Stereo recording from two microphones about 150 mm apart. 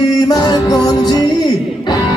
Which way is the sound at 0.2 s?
25° left (ahead or behind).